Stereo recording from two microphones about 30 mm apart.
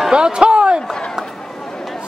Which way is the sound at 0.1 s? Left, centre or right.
Right.